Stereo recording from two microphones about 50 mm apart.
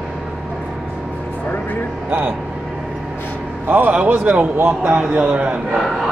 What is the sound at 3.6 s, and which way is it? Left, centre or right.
A man's voice, right.